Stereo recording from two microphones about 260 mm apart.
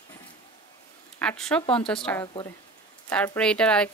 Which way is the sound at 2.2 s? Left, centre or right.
Centre.